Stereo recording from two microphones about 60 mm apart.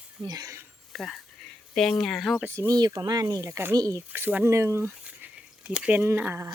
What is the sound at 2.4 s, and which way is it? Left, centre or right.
Speech, right.